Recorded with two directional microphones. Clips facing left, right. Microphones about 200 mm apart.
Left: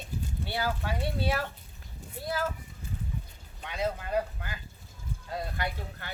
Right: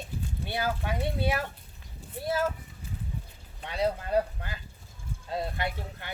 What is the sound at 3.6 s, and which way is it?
Speech, 35° right (ahead or behind).